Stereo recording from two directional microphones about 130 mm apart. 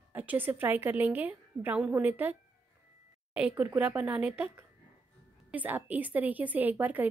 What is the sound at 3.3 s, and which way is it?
A woman's voice, 10° right (ahead or behind).